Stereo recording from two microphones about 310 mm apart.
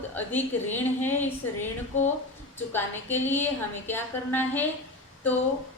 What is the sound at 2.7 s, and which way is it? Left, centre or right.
A woman's voice, centre.